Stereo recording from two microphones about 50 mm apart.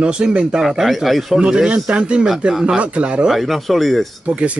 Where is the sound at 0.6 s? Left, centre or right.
Centre.